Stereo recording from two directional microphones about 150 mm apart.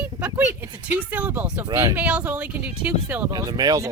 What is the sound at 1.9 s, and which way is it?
Speech, 10° right (ahead or behind).